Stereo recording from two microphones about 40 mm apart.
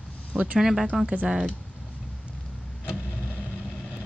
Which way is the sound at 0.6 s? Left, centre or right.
Centre.